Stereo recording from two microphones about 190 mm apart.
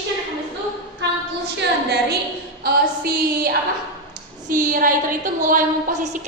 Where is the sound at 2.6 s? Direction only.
55° right (ahead or behind).